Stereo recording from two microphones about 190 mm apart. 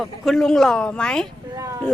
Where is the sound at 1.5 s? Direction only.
15° right (ahead or behind).